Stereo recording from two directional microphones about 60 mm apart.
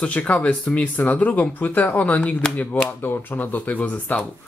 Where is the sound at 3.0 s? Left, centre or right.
Left.